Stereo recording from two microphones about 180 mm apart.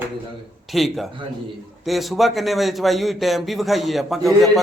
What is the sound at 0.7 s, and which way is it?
A man's voice, centre (ahead or behind).